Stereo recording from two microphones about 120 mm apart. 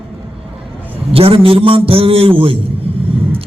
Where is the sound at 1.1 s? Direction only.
50° right (ahead or behind).